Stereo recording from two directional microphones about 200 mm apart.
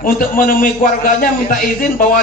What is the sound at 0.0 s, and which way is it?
A man's voice, 45° left (ahead or behind).